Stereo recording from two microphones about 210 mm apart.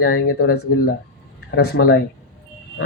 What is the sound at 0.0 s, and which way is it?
Speech, 45° left (ahead or behind).